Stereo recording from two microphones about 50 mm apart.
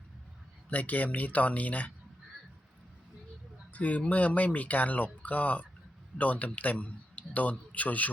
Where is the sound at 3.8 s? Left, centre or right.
Left.